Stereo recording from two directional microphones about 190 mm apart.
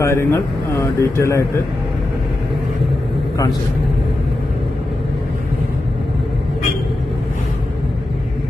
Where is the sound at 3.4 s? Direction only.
15° left (ahead or behind).